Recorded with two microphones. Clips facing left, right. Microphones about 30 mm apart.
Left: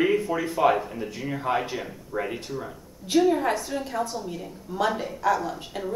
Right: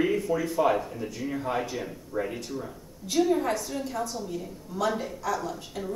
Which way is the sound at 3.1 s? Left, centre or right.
Centre.